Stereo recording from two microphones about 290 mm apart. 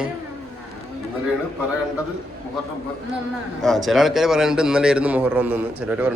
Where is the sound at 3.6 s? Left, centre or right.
Centre.